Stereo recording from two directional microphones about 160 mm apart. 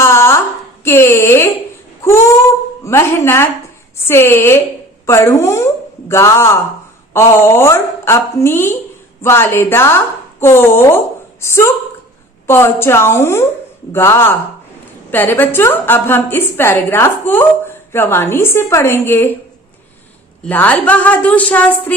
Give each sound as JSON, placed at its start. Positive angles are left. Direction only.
{"t": 0.0, "sound": "a sound", "side_deg": 15}
{"t": 0.9, "sound": "speech", "side_deg": 15}
{"t": 2.8, "sound": "a woman's voice", "side_deg": 15}
{"t": 20.4, "sound": "a woman's voice", "side_deg": 10}